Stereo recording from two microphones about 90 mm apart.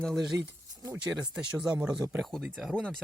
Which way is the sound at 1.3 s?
10° right (ahead or behind).